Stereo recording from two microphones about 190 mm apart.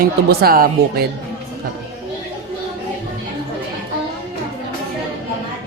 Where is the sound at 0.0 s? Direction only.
50° right (ahead or behind).